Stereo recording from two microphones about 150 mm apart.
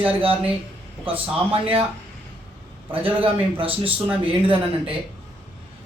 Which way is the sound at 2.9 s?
35° right (ahead or behind).